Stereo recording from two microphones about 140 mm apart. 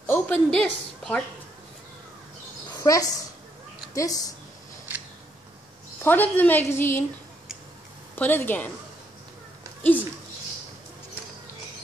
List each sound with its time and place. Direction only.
0.0 s a sound: 15° left (ahead or behind)
0.5 s a woman's voice: 5° left (ahead or behind)
2.8 s a woman's voice: 25° left (ahead or behind)
6.0 s a woman's voice: 15° left (ahead or behind)
8.2 s a woman's voice: 15° left (ahead or behind)